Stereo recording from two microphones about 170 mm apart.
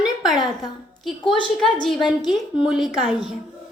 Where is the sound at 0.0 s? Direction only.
Centre (ahead or behind).